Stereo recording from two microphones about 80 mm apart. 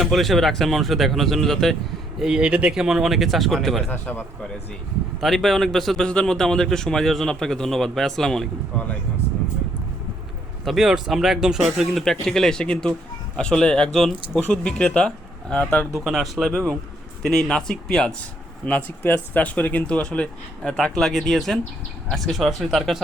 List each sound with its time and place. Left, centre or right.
0.0 s speech: centre
2.1 s speech: centre
3.8 s speech: left
5.2 s speech: centre
8.7 s speech: centre
10.7 s speech: centre
16.0 s speech: centre
18.6 s speech: centre